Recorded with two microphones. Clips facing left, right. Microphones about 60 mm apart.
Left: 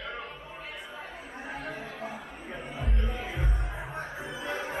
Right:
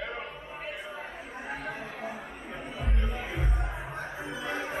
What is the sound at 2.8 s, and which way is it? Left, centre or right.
Music, centre.